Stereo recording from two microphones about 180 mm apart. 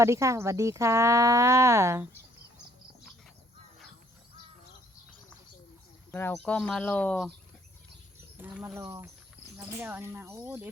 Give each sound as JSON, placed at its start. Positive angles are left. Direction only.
{"t": 0.0, "sound": "speech", "side_deg": -15}
{"t": 6.1, "sound": "speech", "side_deg": 10}
{"t": 8.4, "sound": "speech", "side_deg": -10}